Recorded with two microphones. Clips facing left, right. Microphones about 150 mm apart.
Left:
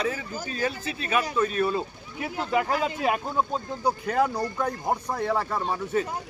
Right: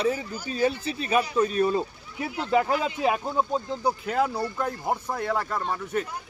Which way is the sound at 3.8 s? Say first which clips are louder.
Left 3 dB; 10° right (ahead or behind).